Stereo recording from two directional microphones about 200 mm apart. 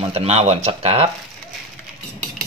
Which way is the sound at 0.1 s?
30° right (ahead or behind).